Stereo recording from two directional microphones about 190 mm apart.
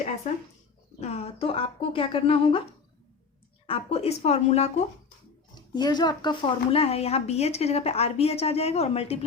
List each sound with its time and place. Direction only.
0.9 s speech: 35° left (ahead or behind)
3.7 s a woman's voice: 30° left (ahead or behind)
5.5 s a woman's voice: 20° left (ahead or behind)